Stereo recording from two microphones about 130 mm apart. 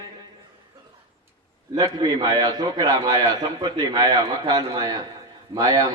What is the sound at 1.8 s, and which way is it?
A man's voice, 30° right (ahead or behind).